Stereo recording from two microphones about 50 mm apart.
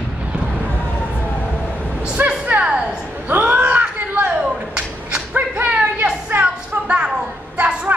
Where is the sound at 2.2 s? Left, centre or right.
Right.